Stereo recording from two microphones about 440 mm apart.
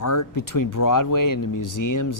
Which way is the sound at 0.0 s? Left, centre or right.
Left.